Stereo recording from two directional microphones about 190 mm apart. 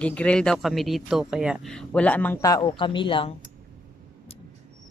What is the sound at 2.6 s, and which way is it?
Speech, 25° left (ahead or behind).